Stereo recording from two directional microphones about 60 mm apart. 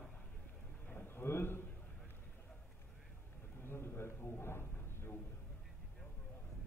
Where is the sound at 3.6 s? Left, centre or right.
Left.